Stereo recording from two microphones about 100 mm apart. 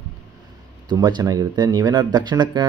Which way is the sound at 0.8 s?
45° right (ahead or behind).